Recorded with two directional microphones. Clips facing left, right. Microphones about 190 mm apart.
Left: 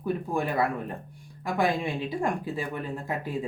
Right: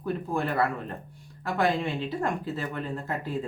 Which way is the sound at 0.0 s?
15° left (ahead or behind).